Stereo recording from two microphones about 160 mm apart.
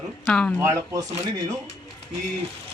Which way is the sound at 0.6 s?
20° right (ahead or behind).